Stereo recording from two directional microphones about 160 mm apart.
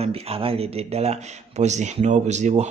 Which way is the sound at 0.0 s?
40° right (ahead or behind).